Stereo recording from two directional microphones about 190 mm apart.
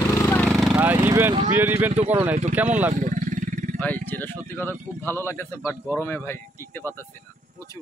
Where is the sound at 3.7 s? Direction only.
10° left (ahead or behind).